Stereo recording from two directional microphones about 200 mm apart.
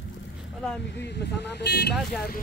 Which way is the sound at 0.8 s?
60° left (ahead or behind).